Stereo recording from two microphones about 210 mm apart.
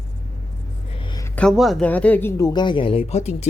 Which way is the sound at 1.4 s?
Centre (ahead or behind).